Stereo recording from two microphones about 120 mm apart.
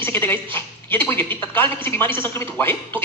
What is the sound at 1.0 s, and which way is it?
Speech, 20° left (ahead or behind).